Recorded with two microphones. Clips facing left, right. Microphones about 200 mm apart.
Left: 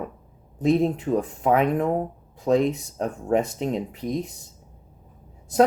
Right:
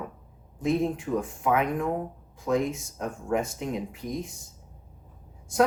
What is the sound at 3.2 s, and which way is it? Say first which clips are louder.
Speech: left 5 dB; 35° left (ahead or behind).